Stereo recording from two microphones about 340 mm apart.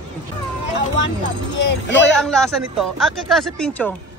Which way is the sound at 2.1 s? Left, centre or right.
Centre.